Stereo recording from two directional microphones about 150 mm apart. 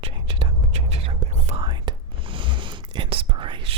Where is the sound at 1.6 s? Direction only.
30° right (ahead or behind).